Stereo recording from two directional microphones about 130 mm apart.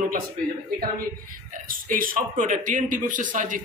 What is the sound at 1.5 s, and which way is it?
A man's voice, 90° right.